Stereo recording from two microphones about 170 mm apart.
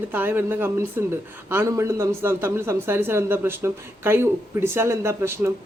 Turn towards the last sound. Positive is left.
turn(degrees=-15)  # may be behind; listen again after turning